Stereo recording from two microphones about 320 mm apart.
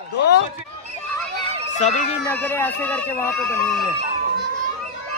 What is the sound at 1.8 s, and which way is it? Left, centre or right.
Speech, left.